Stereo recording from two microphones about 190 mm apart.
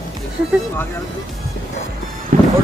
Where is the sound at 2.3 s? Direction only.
45° right (ahead or behind).